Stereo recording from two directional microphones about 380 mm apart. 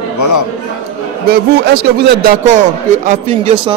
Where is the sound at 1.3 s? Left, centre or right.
Right.